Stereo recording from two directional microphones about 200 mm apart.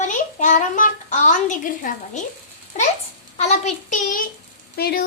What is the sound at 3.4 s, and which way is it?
A child's voice, 35° left (ahead or behind).